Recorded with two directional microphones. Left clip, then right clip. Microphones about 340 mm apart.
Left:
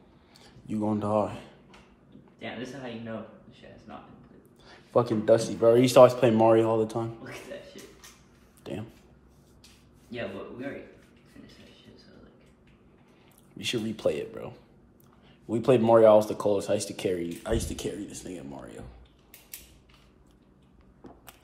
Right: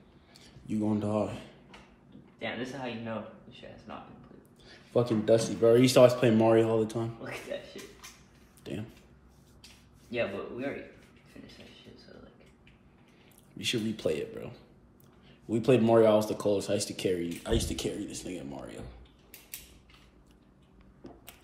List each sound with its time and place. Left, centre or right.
0.4 s a sound: centre
2.3 s a man's voice: centre
4.6 s speech: centre
7.2 s a man's voice: centre
8.6 s a sound: centre
13.6 s speech: centre
15.5 s speech: centre